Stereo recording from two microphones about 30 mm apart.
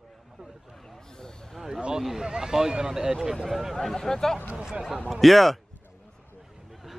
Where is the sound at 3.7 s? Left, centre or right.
Centre.